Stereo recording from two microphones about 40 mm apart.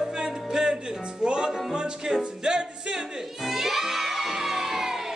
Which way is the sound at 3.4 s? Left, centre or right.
Centre.